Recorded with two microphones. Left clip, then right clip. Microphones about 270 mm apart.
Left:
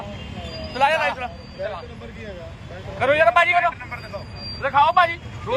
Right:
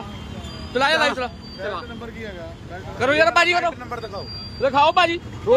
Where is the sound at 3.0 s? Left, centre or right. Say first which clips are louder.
Even; right.